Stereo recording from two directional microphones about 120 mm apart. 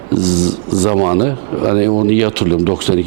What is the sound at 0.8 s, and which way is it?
Speech, 20° right (ahead or behind).